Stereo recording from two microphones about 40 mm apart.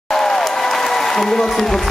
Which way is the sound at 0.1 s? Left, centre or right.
Centre.